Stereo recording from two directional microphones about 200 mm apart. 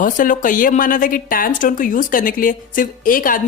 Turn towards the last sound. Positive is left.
turn(degrees=45)  # may be behind; listen again after turning